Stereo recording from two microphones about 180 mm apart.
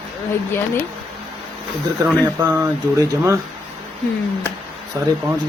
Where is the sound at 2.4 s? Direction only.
15° right (ahead or behind).